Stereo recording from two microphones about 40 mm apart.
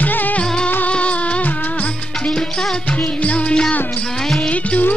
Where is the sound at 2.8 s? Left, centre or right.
Left.